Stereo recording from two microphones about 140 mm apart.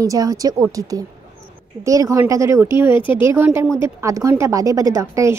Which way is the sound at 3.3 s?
15° right (ahead or behind).